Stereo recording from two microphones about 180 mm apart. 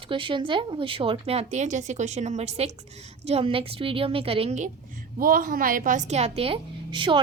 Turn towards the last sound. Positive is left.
turn(degrees=-25)  # may be behind; listen again after turning